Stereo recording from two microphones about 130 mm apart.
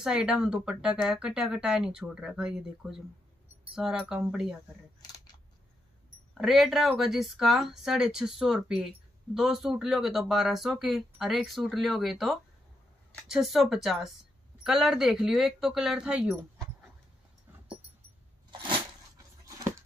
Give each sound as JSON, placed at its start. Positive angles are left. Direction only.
{"t": 0.0, "sound": "speech", "side_deg": -5}
{"t": 6.3, "sound": "speech", "side_deg": 0}
{"t": 19.1, "sound": "a sound", "side_deg": -25}